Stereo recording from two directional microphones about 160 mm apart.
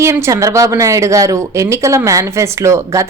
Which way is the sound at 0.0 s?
15° right (ahead or behind).